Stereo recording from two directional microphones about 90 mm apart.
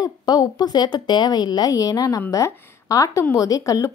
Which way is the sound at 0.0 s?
50° left (ahead or behind).